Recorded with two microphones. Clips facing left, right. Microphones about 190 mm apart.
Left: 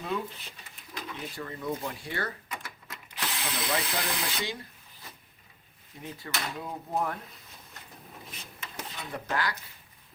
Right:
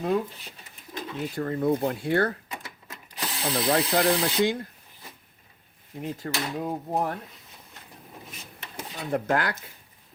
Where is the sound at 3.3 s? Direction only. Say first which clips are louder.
Right 8 dB; 35° right (ahead or behind).